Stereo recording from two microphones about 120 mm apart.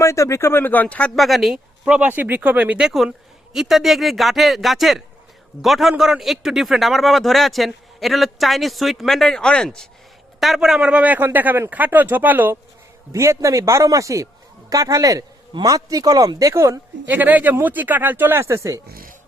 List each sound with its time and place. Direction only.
0.0 s speech: 25° left (ahead or behind); by 1.5 s centre (ahead or behind)
1.5 s a man's voice: 15° right (ahead or behind)
17.1 s a man's voice: 15° right (ahead or behind)